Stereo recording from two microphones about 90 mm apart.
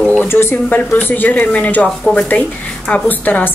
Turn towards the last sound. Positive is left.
turn(degrees=20)  # may be behind; listen again after turning